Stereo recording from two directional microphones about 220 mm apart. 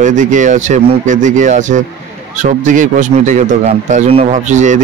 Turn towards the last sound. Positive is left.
turn(degrees=-35)  # may be behind; listen again after turning